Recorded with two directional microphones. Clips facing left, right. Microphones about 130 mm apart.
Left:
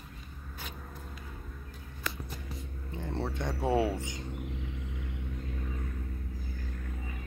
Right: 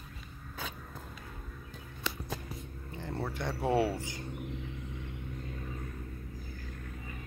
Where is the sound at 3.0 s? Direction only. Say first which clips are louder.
Left 1 dB; 25° left (ahead or behind).